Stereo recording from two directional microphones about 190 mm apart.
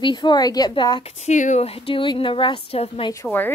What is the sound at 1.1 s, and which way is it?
Speech, 35° left (ahead or behind).